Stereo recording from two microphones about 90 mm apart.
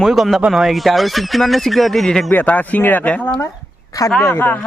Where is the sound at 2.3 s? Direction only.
20° left (ahead or behind).